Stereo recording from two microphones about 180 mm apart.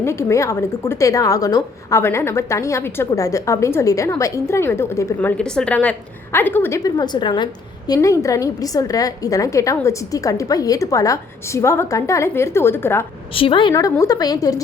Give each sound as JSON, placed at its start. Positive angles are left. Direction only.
{"t": 0.0, "sound": "a woman's voice", "side_deg": 15}
{"t": 5.4, "sound": "a woman's voice", "side_deg": 5}
{"t": 13.3, "sound": "a woman's voice", "side_deg": 30}